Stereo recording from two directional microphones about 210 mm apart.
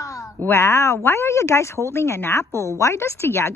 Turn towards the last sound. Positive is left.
turn(degrees=10)  # may be behind; listen again after turning